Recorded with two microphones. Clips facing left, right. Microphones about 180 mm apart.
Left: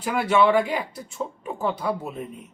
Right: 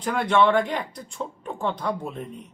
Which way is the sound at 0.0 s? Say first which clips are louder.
Left 1 dB; 5° left (ahead or behind).